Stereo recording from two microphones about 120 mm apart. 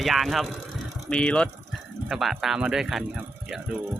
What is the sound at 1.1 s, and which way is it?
Speech, 10° left (ahead or behind).